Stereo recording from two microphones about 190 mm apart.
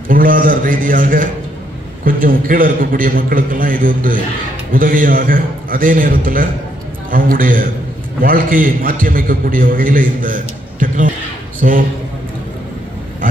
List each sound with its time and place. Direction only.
0.1 s a man's voice: 45° right (ahead or behind)